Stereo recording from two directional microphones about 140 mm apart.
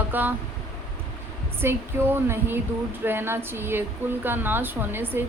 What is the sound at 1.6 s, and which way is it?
A woman's voice, 15° right (ahead or behind).